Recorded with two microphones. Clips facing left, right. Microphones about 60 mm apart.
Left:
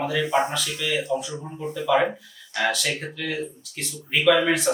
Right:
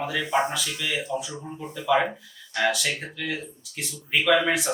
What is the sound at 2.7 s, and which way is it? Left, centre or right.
Speech, centre.